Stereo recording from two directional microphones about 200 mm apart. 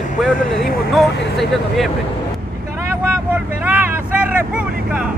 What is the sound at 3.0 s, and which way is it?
Speech, 10° right (ahead or behind).